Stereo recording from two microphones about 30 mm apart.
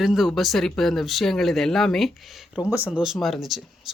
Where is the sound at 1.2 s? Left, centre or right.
Centre.